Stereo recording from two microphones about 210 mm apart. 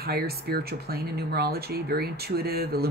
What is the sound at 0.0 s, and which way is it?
Speech, 45° right (ahead or behind).